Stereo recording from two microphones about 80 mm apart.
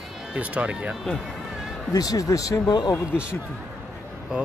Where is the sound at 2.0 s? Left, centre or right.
Left.